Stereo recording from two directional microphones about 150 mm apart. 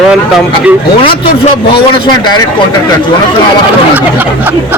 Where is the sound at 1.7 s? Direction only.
30° left (ahead or behind).